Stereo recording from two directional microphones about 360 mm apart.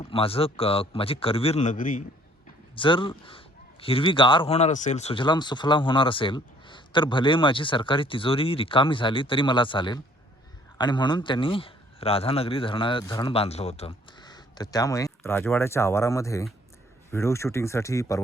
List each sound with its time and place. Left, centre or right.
0.0 s speech: centre